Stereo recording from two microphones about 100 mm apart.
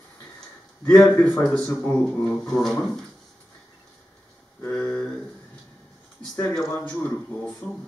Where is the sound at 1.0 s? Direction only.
20° left (ahead or behind).